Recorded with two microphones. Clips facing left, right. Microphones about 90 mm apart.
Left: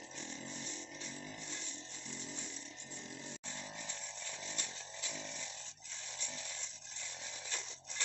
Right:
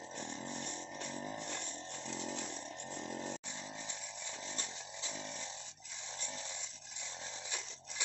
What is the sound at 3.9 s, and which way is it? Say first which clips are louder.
Chainsaw: right 1 dB; 15° right (ahead or behind).